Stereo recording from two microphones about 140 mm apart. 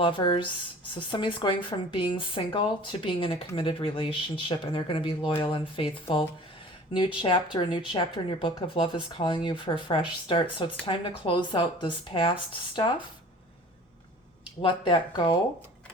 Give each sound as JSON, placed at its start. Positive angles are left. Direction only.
{"t": 0.0, "sound": "speech", "side_deg": 35}
{"t": 14.6, "sound": "speech", "side_deg": 35}